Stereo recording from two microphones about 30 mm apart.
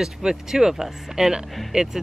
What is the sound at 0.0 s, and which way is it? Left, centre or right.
Speech, centre.